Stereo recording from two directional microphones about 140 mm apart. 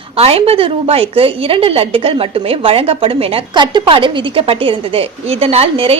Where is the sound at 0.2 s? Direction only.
45° right (ahead or behind).